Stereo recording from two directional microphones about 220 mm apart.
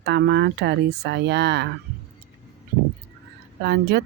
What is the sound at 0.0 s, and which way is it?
Speech, 50° right (ahead or behind).